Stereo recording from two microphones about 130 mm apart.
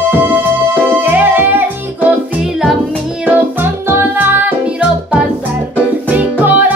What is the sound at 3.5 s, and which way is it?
Music, 15° right (ahead or behind).